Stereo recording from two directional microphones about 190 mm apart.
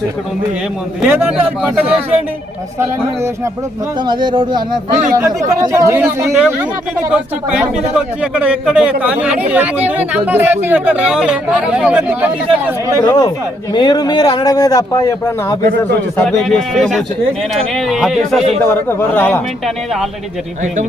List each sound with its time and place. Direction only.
1.0 s speech: 10° right (ahead or behind)
4.0 s speech: 25° right (ahead or behind)
7.9 s speech: 5° right (ahead or behind)
13.0 s speech: 20° left (ahead or behind)
16.1 s speech: 5° left (ahead or behind)
18.7 s a man's voice: 10° left (ahead or behind)